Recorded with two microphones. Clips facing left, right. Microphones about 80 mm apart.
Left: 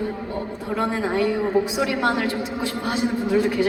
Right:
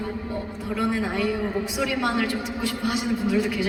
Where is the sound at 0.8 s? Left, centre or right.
Left.